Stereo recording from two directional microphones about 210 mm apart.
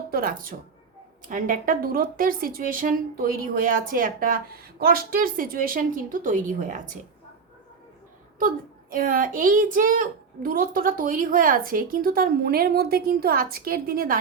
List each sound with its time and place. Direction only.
0.1 s speech: 45° right (ahead or behind)
8.4 s speech: 40° right (ahead or behind)